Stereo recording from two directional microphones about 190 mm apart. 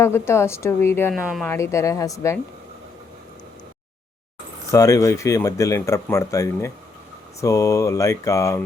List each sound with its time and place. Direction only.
0.0 s speech: 15° left (ahead or behind)
1.1 s speech: 5° right (ahead or behind)
1.5 s speech: 15° left (ahead or behind)
4.7 s speech: 15° left (ahead or behind)